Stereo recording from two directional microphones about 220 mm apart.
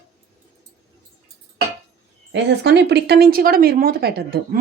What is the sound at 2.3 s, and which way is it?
Speech, 50° right (ahead or behind).